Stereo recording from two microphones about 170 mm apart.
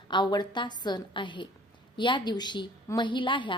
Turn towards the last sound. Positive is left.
turn(degrees=30)  # may be behind; listen again after turning